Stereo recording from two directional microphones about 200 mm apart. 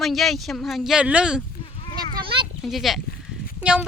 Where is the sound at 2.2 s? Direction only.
25° right (ahead or behind).